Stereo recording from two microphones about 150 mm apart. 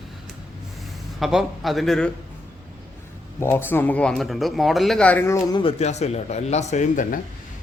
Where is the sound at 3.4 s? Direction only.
15° left (ahead or behind).